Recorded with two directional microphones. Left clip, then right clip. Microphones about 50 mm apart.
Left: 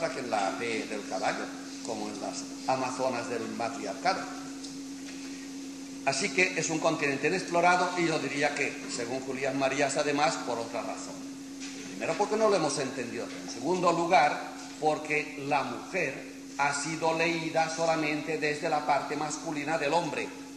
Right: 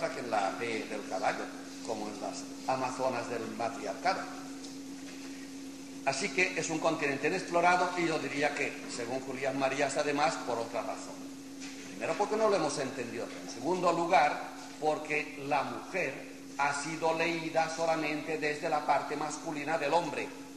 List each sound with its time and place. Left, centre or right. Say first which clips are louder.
0.0 s a man's voice: left 2 dB; centre
6.0 s a man's voice: left 3 dB; centre
12.0 s a man's voice: left 3 dB; centre
15.1 s a man's voice: left 3 dB; centre